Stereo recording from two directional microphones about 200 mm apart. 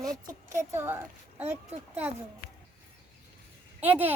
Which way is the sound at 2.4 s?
50° left (ahead or behind).